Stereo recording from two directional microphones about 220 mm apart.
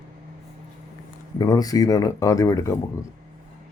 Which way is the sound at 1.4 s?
15° left (ahead or behind).